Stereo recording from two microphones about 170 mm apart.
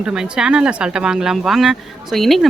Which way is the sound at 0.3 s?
5° right (ahead or behind).